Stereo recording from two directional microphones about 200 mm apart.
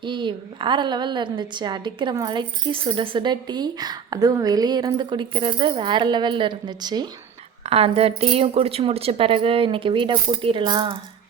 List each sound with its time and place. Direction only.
0.0 s a woman's voice: 25° right (ahead or behind)
7.6 s a woman's voice: 30° right (ahead or behind)